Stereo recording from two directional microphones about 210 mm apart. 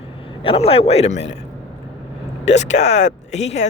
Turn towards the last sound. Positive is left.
turn(degrees=30)  # may be behind; listen again after turning